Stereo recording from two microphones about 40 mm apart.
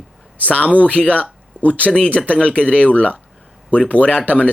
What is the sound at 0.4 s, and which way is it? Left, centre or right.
Speech, left.